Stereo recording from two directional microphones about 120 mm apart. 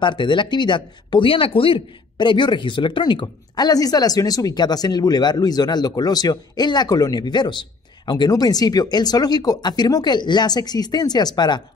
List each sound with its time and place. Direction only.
0.0 s speech: 40° left (ahead or behind)